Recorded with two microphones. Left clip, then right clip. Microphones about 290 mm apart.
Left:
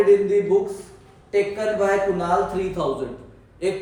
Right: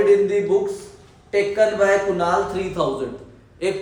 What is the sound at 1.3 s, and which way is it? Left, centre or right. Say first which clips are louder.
Speech: right 4 dB; centre.